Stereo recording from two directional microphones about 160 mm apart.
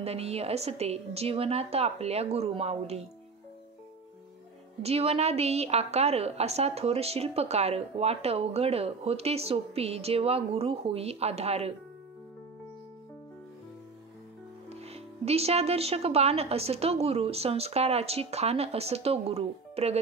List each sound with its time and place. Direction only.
0.0 s a woman's voice: 40° right (ahead or behind)
4.8 s a woman's voice: 40° right (ahead or behind)
14.7 s a woman's voice: 40° right (ahead or behind)